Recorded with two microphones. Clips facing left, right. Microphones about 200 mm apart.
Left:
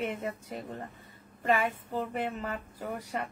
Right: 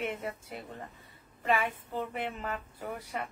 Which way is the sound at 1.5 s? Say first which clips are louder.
Left 2 dB; 45° left (ahead or behind).